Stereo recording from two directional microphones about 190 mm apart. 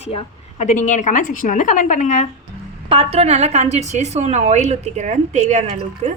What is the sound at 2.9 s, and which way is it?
A woman's voice, 30° right (ahead or behind).